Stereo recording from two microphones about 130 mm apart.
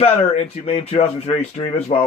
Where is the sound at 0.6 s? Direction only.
50° left (ahead or behind).